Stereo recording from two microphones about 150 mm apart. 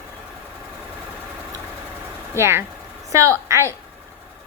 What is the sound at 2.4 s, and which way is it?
A woman's voice, 15° right (ahead or behind).